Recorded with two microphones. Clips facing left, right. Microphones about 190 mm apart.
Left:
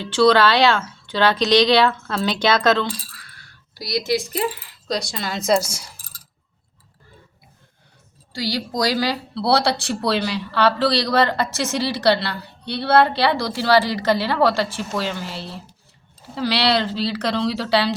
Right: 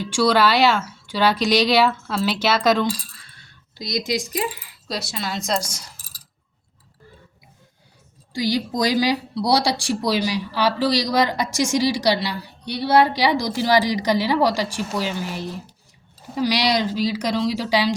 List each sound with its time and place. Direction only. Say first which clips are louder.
0.0 s speech: left 3 dB; 10° right (ahead or behind)
3.2 s coin: left 2 dB; 25° right (ahead or behind)
4.9 s speech: left 3 dB; 5° right (ahead or behind)
8.3 s speech: right 3 dB; 20° right (ahead or behind)